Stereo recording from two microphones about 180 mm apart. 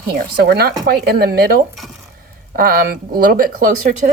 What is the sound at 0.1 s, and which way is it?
A woman's voice, 65° right (ahead or behind).